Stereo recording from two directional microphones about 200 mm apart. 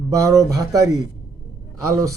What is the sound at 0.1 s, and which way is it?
A man's voice, 15° right (ahead or behind).